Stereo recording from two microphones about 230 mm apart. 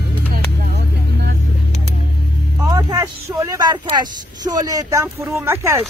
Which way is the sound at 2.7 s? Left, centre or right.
Centre.